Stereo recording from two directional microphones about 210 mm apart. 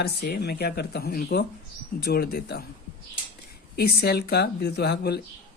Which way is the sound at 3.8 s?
50° left (ahead or behind).